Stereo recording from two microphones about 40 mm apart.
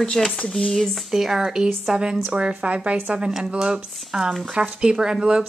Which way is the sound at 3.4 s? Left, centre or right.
Right.